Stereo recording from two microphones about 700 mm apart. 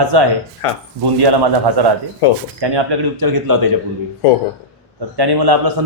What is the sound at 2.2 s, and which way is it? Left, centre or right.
Speech, left.